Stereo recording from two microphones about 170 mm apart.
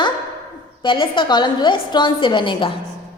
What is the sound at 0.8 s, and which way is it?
A man's voice, 30° left (ahead or behind).